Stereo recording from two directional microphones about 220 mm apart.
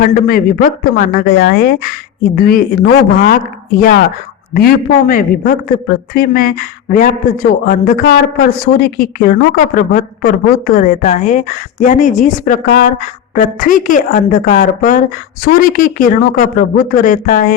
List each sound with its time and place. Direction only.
0.0 s speech: 40° left (ahead or behind)